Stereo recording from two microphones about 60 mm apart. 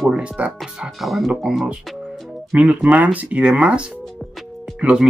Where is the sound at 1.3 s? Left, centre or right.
Centre.